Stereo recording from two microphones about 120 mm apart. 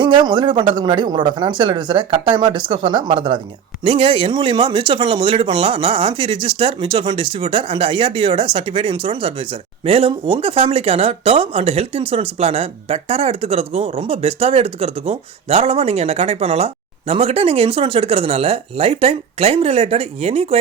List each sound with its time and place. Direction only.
0.0 s speech: 40° right (ahead or behind); by 20.6 s 60° right (ahead or behind)